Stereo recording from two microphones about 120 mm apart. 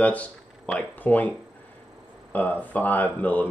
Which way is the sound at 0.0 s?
10° left (ahead or behind).